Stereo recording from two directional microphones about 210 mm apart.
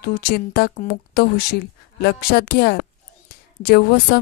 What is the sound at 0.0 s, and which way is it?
A woman's voice, 45° left (ahead or behind).